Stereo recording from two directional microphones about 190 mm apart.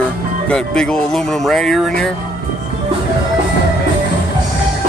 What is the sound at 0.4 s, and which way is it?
Speech, 5° left (ahead or behind).